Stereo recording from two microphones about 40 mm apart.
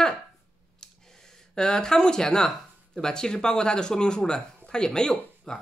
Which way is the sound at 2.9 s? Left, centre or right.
Centre.